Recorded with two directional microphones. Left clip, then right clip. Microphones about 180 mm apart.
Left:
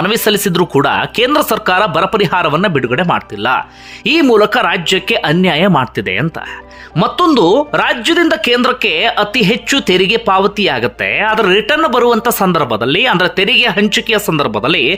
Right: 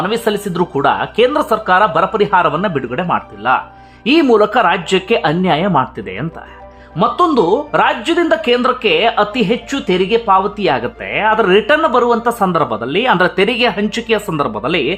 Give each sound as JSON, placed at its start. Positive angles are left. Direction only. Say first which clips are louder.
{"t": 0.0, "sound": "speech", "louder": "left 4 dB", "side_deg": 20}